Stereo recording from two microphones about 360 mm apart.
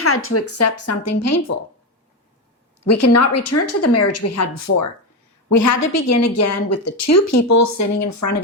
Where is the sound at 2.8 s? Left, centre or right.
Left.